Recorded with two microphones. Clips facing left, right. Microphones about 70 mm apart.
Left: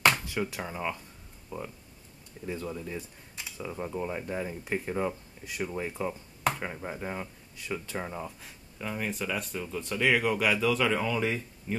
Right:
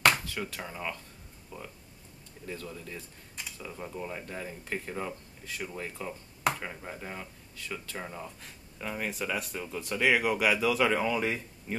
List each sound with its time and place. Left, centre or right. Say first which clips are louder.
0.3 s speech: left 4 dB; centre